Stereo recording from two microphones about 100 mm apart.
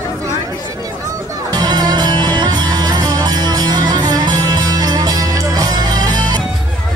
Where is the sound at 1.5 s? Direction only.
40° right (ahead or behind).